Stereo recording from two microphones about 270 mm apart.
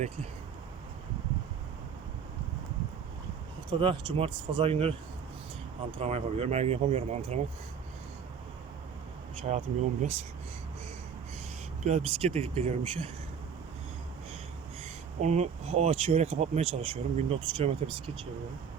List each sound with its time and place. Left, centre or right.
3.7 s speech: centre
6.0 s speech: right
9.4 s speech: right
11.8 s speech: right
15.2 s speech: right